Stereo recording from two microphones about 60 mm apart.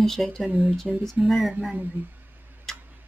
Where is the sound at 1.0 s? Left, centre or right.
Centre.